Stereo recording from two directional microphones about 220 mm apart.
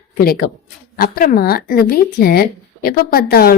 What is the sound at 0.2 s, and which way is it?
Speech, 45° left (ahead or behind).